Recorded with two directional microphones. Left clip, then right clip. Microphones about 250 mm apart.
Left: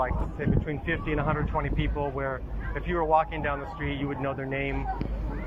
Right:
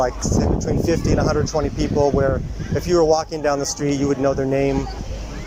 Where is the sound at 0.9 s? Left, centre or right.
Right.